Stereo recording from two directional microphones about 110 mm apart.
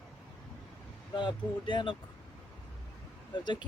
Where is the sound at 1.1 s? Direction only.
45° left (ahead or behind).